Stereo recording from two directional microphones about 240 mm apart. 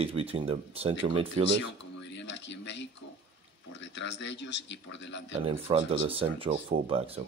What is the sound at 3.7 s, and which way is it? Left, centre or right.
A man's voice, left.